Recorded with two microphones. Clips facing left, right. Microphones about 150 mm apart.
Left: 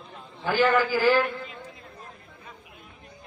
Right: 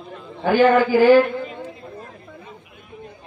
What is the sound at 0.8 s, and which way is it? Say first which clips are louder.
Speech: right 9 dB; 60° right (ahead or behind).